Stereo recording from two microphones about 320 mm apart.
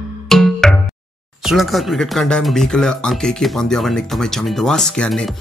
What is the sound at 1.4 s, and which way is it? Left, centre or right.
Speech, centre.